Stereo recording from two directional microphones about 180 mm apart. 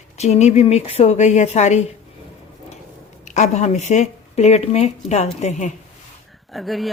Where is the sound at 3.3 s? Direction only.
40° left (ahead or behind).